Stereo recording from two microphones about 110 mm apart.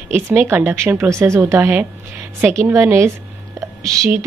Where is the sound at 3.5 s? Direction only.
30° right (ahead or behind).